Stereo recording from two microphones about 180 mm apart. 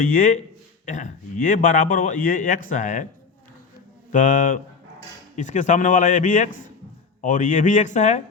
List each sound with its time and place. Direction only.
0.0 s a man's voice: 50° left (ahead or behind)
4.1 s a man's voice: 45° left (ahead or behind)